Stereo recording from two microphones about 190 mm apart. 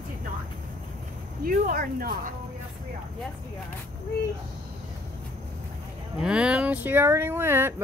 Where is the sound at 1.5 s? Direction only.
50° right (ahead or behind).